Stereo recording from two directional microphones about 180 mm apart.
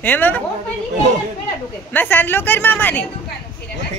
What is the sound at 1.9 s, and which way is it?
Speech, 10° left (ahead or behind).